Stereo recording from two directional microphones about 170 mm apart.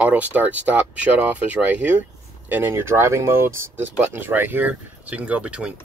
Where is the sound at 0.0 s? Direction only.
10° right (ahead or behind).